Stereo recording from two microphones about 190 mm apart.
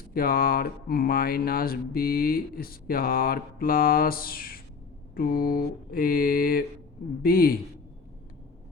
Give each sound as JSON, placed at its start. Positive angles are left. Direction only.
{"t": 0.1, "sound": "speech", "side_deg": 50}